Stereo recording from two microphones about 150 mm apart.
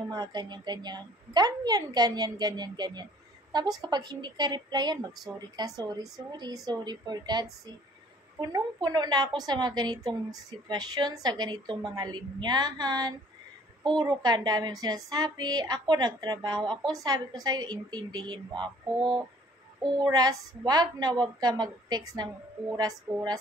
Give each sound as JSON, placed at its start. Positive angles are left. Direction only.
{"t": 0.1, "sound": "a woman's voice", "side_deg": -30}
{"t": 5.3, "sound": "speech", "side_deg": -10}
{"t": 5.6, "sound": "a woman's voice", "side_deg": -25}